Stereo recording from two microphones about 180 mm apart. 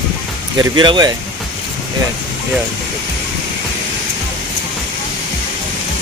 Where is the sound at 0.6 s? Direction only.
25° right (ahead or behind).